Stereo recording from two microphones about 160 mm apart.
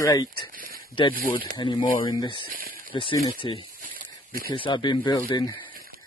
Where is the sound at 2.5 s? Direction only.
60° right (ahead or behind).